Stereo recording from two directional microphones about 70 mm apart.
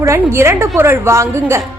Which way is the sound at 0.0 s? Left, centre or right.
Right.